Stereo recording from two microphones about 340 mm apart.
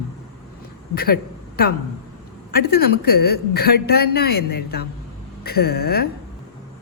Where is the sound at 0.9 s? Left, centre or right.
Left.